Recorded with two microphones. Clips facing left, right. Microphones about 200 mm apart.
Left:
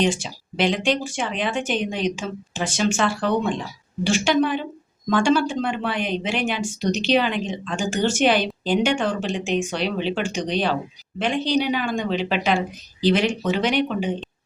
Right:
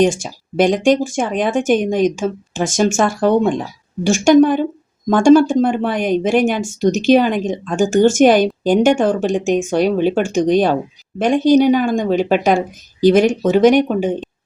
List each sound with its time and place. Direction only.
0.0 s speech: 45° right (ahead or behind)